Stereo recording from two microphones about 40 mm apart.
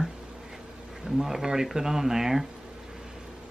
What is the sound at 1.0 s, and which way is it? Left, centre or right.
Speech, centre.